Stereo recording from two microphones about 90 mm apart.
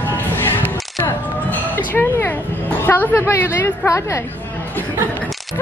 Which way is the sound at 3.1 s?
30° left (ahead or behind).